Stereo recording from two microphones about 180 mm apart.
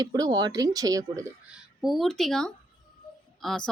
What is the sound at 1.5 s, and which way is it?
A woman's voice, centre (ahead or behind).